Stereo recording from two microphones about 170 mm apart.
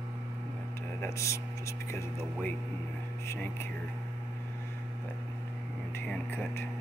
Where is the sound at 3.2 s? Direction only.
15° left (ahead or behind).